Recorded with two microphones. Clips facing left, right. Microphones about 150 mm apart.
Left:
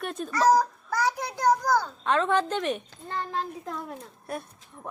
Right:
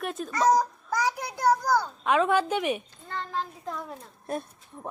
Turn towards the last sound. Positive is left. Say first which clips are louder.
# right 3 dB
turn(degrees=-25)  # may be behind; listen again after turning